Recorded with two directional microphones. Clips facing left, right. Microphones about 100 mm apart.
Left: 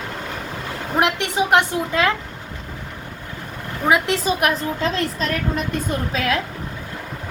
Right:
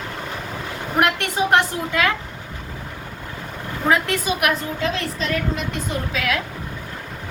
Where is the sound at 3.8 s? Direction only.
20° left (ahead or behind).